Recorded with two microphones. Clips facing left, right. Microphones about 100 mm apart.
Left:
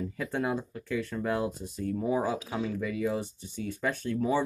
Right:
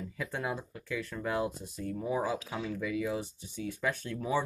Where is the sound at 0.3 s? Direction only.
Centre (ahead or behind).